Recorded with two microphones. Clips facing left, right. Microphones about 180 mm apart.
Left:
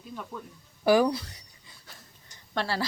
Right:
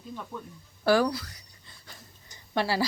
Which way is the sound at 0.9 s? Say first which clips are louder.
Left 2 dB; 20° left (ahead or behind).